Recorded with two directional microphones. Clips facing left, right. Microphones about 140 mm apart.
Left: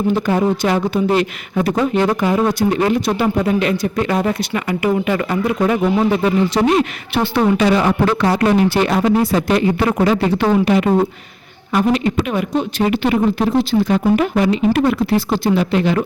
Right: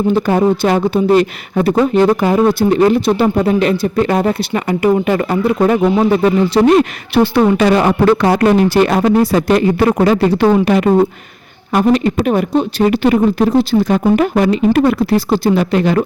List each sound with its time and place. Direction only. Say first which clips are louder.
0.2 s speech: right 4 dB; 35° right (ahead or behind)
7.6 s speech: right 3 dB; 55° right (ahead or behind)